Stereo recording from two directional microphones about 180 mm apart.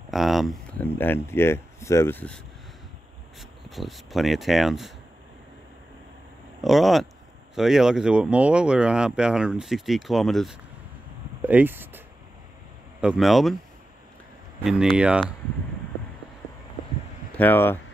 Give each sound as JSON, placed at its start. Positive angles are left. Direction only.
{"t": 0.1, "sound": "speech", "side_deg": 0}
{"t": 6.6, "sound": "speech", "side_deg": 0}
{"t": 11.4, "sound": "speech", "side_deg": -10}
{"t": 13.0, "sound": "speech", "side_deg": -5}
{"t": 14.6, "sound": "speech", "side_deg": 0}
{"t": 17.4, "sound": "speech", "side_deg": 10}